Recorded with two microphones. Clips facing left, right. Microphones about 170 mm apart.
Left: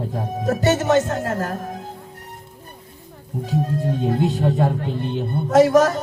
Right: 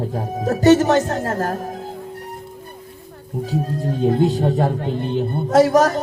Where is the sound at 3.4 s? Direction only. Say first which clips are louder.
Even; 40° right (ahead or behind).